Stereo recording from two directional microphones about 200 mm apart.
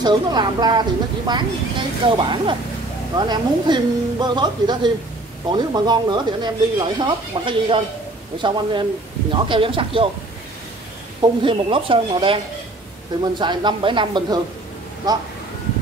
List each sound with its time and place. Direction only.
0.0 s speech: 20° right (ahead or behind)
11.1 s speech: 25° right (ahead or behind)